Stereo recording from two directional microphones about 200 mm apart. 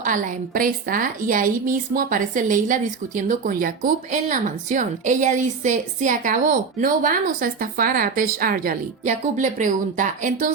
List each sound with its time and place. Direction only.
0.0 s speech: 40° right (ahead or behind)